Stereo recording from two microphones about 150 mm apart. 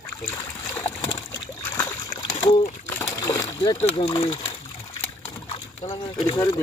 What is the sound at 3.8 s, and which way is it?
Speech, 35° left (ahead or behind).